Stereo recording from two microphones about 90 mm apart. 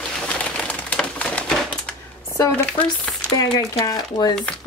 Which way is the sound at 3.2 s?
50° left (ahead or behind).